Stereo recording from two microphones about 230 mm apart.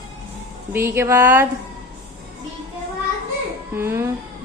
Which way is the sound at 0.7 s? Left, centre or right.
Centre.